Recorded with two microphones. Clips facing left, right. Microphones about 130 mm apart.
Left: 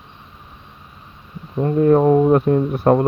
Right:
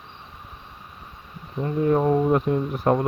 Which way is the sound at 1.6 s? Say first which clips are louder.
Left 7 dB; 50° left (ahead or behind).